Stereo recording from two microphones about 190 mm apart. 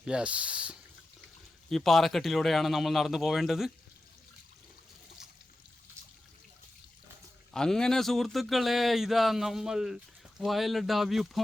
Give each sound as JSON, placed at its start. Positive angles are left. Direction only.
{"t": 0.0, "sound": "speech", "side_deg": -5}
{"t": 7.5, "sound": "speech", "side_deg": 5}